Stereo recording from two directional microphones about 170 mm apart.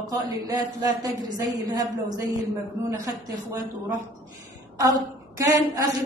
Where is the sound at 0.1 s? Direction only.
25° right (ahead or behind).